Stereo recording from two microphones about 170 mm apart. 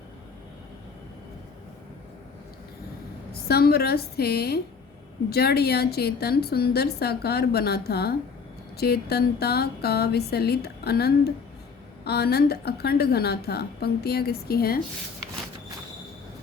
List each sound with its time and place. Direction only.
3.5 s a woman's voice: 65° left (ahead or behind)